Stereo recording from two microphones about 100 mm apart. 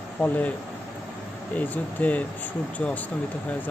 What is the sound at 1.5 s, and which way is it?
Speech, 15° left (ahead or behind).